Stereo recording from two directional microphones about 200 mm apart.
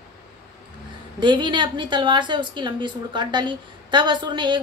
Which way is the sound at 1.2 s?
25° right (ahead or behind).